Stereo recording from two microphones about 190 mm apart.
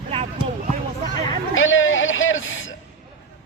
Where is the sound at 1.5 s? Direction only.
90° left.